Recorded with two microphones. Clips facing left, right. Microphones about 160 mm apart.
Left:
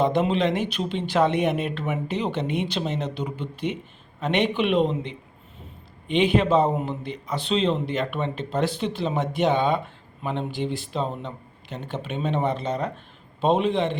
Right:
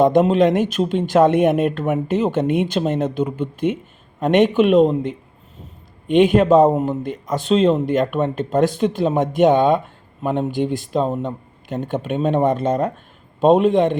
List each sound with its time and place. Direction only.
0.0 s a man's voice: 45° right (ahead or behind)